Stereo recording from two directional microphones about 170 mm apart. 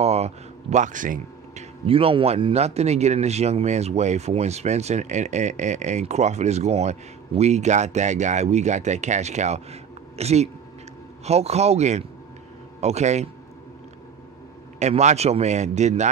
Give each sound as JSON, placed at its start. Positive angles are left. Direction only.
{"t": 0.0, "sound": "speech", "side_deg": -40}
{"t": 14.8, "sound": "speech", "side_deg": -40}